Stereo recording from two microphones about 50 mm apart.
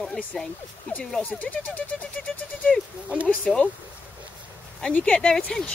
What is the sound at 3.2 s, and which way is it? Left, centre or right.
Speech, left.